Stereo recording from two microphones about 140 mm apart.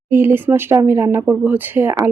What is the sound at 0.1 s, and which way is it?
Speech, 15° right (ahead or behind).